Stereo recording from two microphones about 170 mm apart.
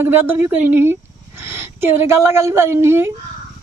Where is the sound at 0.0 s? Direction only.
15° right (ahead or behind).